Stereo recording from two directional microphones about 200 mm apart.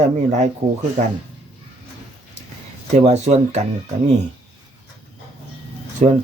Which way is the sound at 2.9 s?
35° right (ahead or behind).